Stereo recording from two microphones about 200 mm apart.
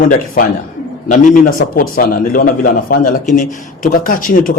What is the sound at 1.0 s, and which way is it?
Speech, 40° left (ahead or behind).